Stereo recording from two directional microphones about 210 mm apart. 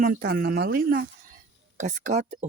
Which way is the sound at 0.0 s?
45° right (ahead or behind).